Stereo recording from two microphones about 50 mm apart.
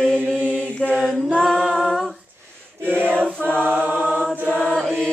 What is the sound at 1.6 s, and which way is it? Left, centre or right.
Humming, centre.